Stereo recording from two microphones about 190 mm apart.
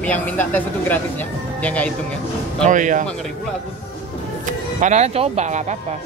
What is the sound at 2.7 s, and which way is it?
Speech, 40° right (ahead or behind).